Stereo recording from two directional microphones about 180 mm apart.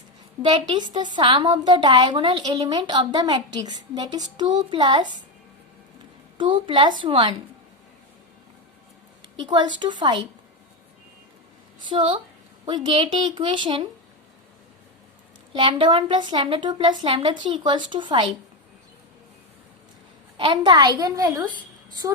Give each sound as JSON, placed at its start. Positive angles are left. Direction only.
{"t": 0.4, "sound": "a woman's voice", "side_deg": -15}
{"t": 6.3, "sound": "a woman's voice", "side_deg": -25}
{"t": 9.5, "sound": "a woman's voice", "side_deg": -25}
{"t": 11.9, "sound": "a woman's voice", "side_deg": -25}
{"t": 15.5, "sound": "a woman's voice", "side_deg": -30}
{"t": 20.3, "sound": "a woman's voice", "side_deg": -25}